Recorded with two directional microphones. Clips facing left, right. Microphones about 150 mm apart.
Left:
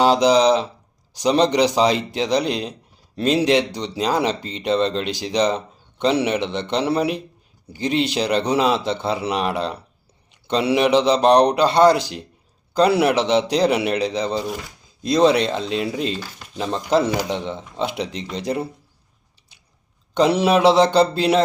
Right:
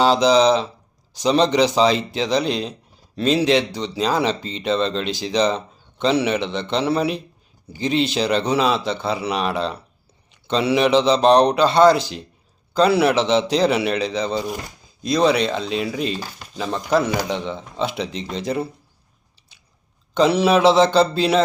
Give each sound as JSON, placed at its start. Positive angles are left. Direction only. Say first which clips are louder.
{"t": 0.0, "sound": "a man's voice", "louder": "even", "side_deg": 15}
{"t": 20.1, "sound": "a man's voice", "louder": "even", "side_deg": 15}